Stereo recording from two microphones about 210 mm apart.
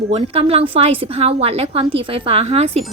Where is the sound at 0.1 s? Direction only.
30° right (ahead or behind).